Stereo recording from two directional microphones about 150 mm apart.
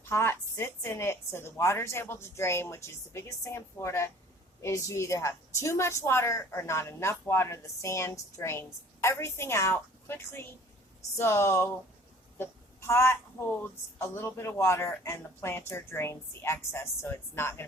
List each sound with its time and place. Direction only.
0.0 s a woman's voice: 15° left (ahead or behind)